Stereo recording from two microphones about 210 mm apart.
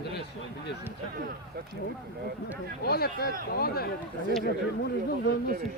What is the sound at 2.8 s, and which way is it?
A man's voice, 50° left (ahead or behind).